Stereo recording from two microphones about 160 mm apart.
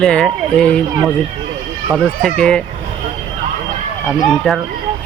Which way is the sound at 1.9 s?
5° left (ahead or behind).